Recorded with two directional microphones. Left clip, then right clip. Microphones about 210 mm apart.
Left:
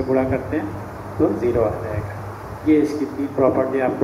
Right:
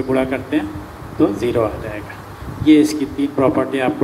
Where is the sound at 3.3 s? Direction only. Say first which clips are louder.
Even; 75° right (ahead or behind).